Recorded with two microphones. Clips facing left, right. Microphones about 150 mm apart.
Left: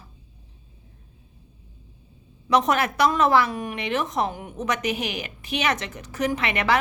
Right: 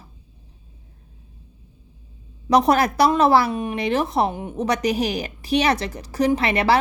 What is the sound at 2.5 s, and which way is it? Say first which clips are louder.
A woman's voice: right 4 dB; 35° right (ahead or behind).